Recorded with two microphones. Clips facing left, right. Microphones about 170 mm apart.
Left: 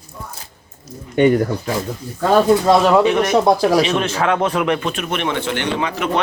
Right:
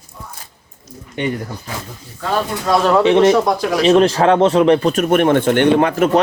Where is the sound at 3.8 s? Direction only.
35° right (ahead or behind); by 6.0 s 55° right (ahead or behind).